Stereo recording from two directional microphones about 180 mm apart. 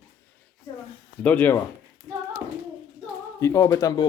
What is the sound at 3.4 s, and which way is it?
Speech, 15° left (ahead or behind).